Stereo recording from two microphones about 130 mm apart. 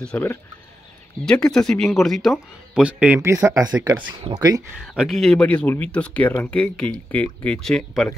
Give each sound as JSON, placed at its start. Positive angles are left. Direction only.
{"t": 0.0, "sound": "speech", "side_deg": 10}
{"t": 3.2, "sound": "speech", "side_deg": -25}
{"t": 4.7, "sound": "speech", "side_deg": 0}